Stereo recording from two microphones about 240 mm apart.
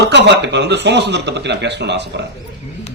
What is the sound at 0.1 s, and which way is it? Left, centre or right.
A man's voice, right.